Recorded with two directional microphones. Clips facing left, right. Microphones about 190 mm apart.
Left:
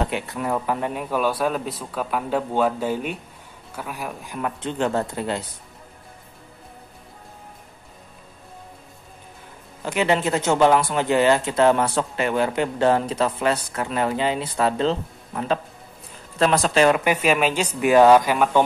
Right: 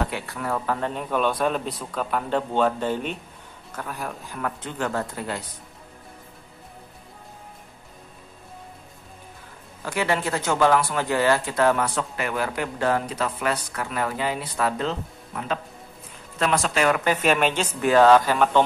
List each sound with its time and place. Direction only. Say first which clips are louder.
0.0 s a man's voice: left 3 dB; 20° left (ahead or behind)
9.8 s speech: left 4 dB; 20° left (ahead or behind)
17.0 s a man's voice: left 1 dB; 10° left (ahead or behind)